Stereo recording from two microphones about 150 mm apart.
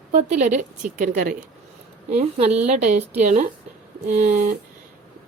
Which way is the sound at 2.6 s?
55° right (ahead or behind).